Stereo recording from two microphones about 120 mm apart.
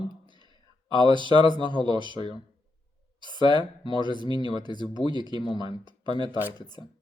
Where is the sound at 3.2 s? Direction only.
40° right (ahead or behind).